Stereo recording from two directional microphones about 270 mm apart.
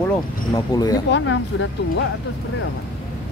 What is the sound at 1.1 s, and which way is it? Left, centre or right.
Speech, left.